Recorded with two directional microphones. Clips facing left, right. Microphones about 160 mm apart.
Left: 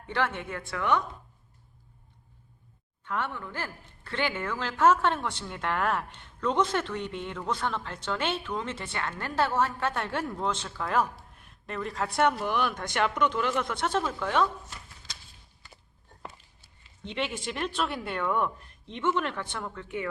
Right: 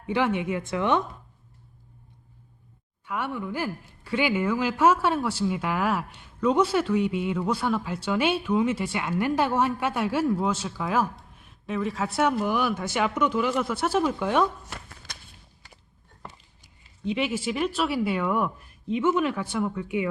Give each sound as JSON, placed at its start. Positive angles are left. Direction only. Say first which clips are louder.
{"t": 0.0, "sound": "speech", "louder": "right 6 dB", "side_deg": -15}
{"t": 3.0, "sound": "speech", "louder": "right 3 dB", "side_deg": -10}
{"t": 14.7, "sound": "a sound", "louder": "right 5 dB", "side_deg": -60}
{"t": 16.6, "sound": "speech", "louder": "right 1 dB", "side_deg": -5}